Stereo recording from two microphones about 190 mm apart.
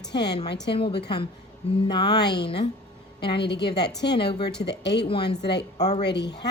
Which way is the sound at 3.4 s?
65° left (ahead or behind).